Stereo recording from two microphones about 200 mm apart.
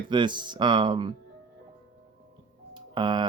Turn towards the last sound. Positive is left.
turn(degrees=-25)  # may be behind; listen again after turning